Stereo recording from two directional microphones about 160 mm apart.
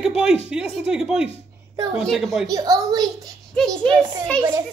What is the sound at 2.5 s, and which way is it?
Speech, 25° right (ahead or behind).